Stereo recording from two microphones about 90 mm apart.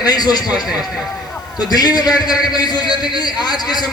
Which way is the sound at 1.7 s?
50° left (ahead or behind).